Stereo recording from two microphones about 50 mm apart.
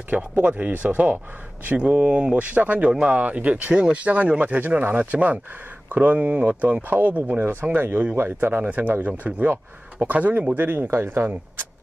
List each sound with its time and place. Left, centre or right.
0.4 s speech: right
1.8 s speech: right